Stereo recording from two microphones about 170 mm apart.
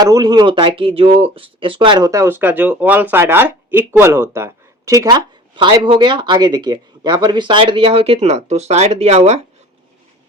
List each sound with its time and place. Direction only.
0.0 s speech: 20° right (ahead or behind); by 9.4 s 40° right (ahead or behind)